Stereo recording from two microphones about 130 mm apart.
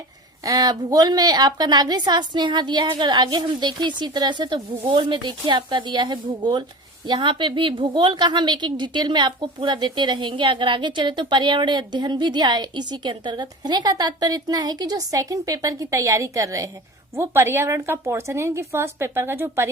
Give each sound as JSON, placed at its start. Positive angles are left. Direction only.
{"t": 0.4, "sound": "a woman's voice", "side_deg": -30}